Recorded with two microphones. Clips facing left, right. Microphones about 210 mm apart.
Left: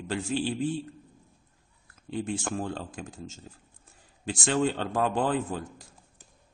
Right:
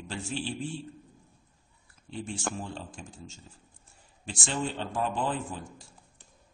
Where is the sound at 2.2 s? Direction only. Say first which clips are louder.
Left 1 dB; 80° left.